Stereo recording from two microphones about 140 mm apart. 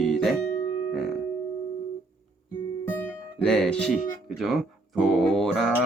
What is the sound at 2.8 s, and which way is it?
Speech, 15° left (ahead or behind).